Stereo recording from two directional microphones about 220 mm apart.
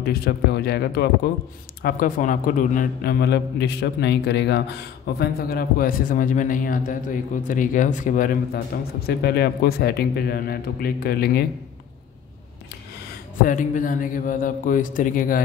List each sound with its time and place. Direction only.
0.0 s a man's voice: 45° left (ahead or behind)
13.4 s speech: 35° left (ahead or behind)